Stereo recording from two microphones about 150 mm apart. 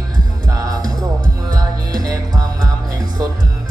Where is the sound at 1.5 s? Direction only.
25° right (ahead or behind).